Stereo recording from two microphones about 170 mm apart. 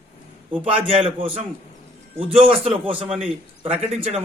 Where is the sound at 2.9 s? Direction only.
5° right (ahead or behind).